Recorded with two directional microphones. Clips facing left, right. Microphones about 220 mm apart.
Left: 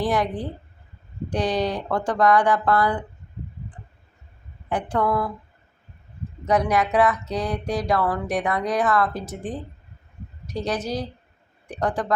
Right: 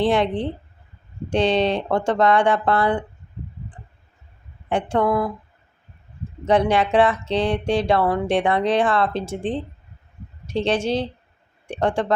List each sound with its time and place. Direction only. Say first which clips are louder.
0.0 s speech: right 4 dB; 25° right (ahead or behind)
4.7 s speech: right 3 dB; 25° right (ahead or behind)
6.4 s speech: right 3 dB; 30° right (ahead or behind)